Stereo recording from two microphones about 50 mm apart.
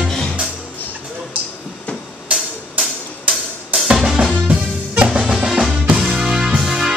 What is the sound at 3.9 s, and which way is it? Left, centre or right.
Music, centre.